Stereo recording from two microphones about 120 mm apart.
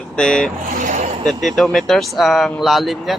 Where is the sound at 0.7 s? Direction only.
90° right.